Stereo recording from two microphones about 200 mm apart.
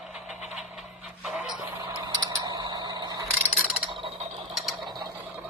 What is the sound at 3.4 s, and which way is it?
Mechanisms, 5° right (ahead or behind).